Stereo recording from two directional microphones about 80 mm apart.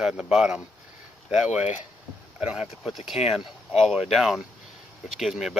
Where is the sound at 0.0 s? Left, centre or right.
Centre.